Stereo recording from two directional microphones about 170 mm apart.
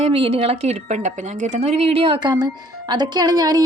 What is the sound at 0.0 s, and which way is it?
A woman's voice, 35° right (ahead or behind).